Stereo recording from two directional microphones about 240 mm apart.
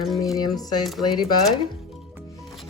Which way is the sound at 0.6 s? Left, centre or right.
Centre.